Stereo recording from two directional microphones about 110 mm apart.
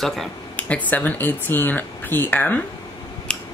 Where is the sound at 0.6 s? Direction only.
15° left (ahead or behind).